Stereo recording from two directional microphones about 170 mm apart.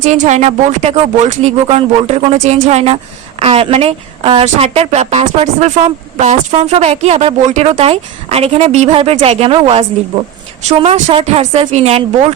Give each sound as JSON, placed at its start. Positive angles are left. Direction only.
{"t": 0.0, "sound": "speech", "side_deg": -45}